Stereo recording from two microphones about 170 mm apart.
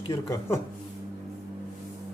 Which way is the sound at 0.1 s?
15° left (ahead or behind).